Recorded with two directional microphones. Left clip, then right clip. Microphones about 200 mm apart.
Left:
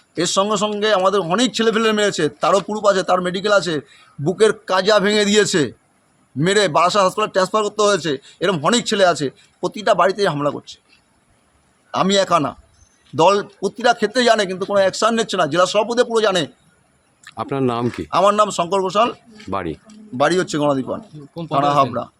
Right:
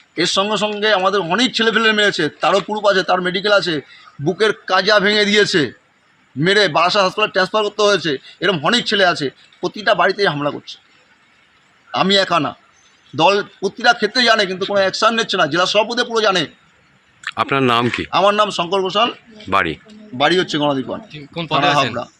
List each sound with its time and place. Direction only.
0.2 s speech: 30° left (ahead or behind)
11.9 s speech: 30° left (ahead or behind)
17.2 s speech: 10° left (ahead or behind)
18.1 s speech: 35° left (ahead or behind)
19.5 s speech: 10° left (ahead or behind)
20.1 s speech: 40° left (ahead or behind)
21.3 s speech: 5° right (ahead or behind)